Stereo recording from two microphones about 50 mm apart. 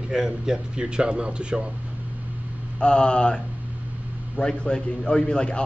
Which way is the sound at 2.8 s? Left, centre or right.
Centre.